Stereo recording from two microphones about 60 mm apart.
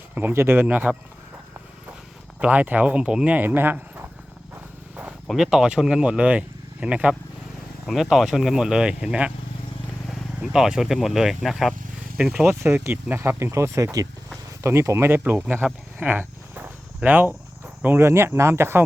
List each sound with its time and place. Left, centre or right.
0.1 s speech: right
2.4 s speech: right
3.3 s speech: right
5.3 s speech: centre
8.1 s speech: centre
10.4 s speech: centre
12.5 s speech: right
15.2 s speech: right
16.0 s a sound: right
17.0 s speech: right
17.8 s speech: right